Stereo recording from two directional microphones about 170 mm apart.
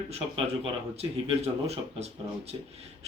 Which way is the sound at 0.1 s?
35° right (ahead or behind).